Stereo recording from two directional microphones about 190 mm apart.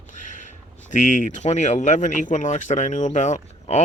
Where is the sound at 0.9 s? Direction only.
40° left (ahead or behind).